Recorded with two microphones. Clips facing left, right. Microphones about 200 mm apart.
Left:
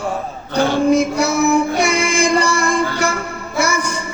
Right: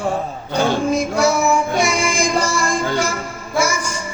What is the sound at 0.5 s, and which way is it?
Music, 60° left (ahead or behind).